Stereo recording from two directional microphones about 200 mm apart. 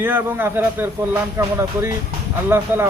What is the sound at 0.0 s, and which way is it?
Speech, 10° right (ahead or behind).